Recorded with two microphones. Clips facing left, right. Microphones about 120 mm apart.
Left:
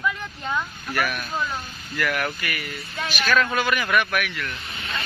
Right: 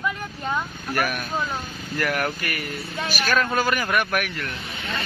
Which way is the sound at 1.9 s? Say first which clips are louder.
Right 1 dB; 40° right (ahead or behind).